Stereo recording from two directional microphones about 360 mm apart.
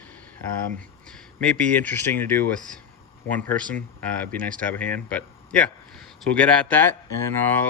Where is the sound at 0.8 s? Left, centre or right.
Centre.